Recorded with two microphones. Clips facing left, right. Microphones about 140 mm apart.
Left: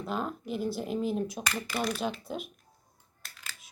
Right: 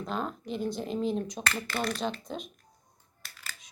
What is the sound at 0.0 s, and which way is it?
Speech, 5° left (ahead or behind).